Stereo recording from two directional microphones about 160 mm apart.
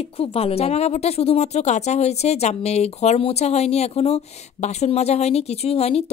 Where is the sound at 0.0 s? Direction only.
40° left (ahead or behind).